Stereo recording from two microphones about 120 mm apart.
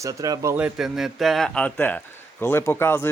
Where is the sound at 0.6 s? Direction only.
10° right (ahead or behind); by 3.0 s 20° left (ahead or behind).